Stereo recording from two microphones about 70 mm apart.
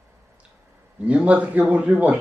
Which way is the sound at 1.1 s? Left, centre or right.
Right.